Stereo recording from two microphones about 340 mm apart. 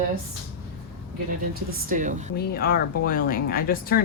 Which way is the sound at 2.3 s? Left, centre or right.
Left.